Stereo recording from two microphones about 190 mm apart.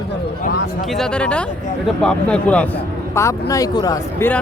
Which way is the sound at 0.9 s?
5° left (ahead or behind).